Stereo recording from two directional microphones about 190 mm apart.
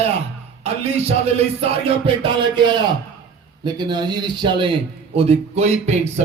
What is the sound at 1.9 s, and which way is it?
Speech, 30° right (ahead or behind).